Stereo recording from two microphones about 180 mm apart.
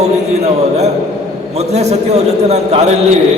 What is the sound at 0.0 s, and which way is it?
Music, 35° right (ahead or behind).